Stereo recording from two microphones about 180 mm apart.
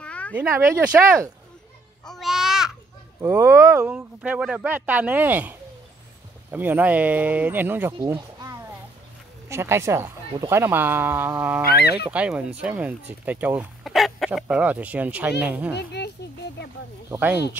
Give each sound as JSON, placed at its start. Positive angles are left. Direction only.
{"t": 0.0, "sound": "a sound", "side_deg": 5}
{"t": 0.4, "sound": "speech", "side_deg": -15}
{"t": 2.0, "sound": "babbling", "side_deg": 0}
{"t": 3.2, "sound": "speech", "side_deg": -15}
{"t": 8.1, "sound": "a sound", "side_deg": -20}
{"t": 9.5, "sound": "speech", "side_deg": -15}
{"t": 15.7, "sound": "speech", "side_deg": 65}
{"t": 17.1, "sound": "speech", "side_deg": -10}